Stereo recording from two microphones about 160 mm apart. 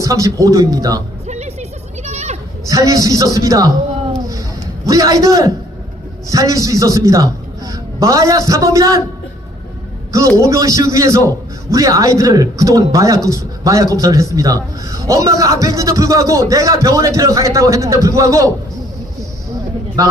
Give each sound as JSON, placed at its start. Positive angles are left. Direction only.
{"t": 0.0, "sound": "a man's voice", "side_deg": -20}
{"t": 1.3, "sound": "music", "side_deg": -45}
{"t": 2.0, "sound": "goat", "side_deg": -45}
{"t": 2.6, "sound": "a man's voice", "side_deg": -20}
{"t": 4.9, "sound": "a man's voice", "side_deg": -20}
{"t": 10.1, "sound": "a man's voice", "side_deg": -20}
{"t": 20.0, "sound": "a man's voice", "side_deg": -20}